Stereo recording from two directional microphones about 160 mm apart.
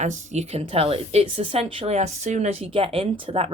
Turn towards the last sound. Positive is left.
turn(degrees=-35)  # may be behind; listen again after turning